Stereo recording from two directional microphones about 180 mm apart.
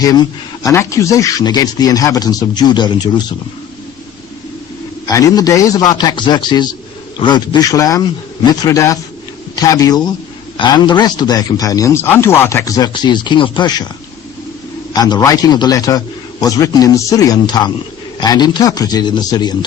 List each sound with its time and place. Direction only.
0.6 s speech: 15° left (ahead or behind)
5.0 s a man's voice: 20° left (ahead or behind)
14.9 s speech: 20° left (ahead or behind)